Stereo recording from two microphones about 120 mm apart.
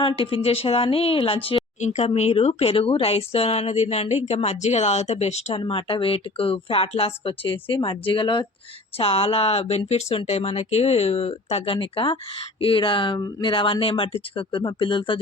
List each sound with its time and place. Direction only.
0.0 s speech: 50° left (ahead or behind)
1.8 s speech: 75° left (ahead or behind); by 13.1 s 45° left (ahead or behind)
13.1 s speech: 30° left (ahead or behind)
13.5 s speech: 45° left (ahead or behind)